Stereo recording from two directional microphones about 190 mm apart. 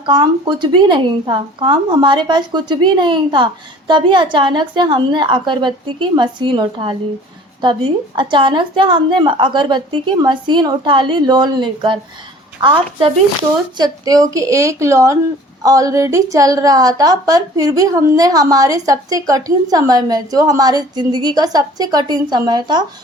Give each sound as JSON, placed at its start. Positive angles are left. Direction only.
{"t": 0.0, "sound": "a woman's voice", "side_deg": -25}